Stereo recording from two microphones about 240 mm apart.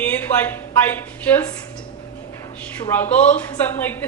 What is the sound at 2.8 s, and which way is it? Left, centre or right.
A woman's voice, centre.